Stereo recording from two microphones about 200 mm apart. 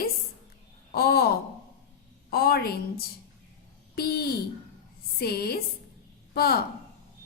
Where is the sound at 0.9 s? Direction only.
50° left (ahead or behind).